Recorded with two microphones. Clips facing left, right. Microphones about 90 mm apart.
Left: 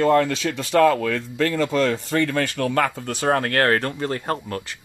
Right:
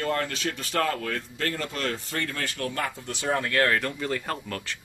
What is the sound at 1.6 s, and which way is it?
Speech, 90° left.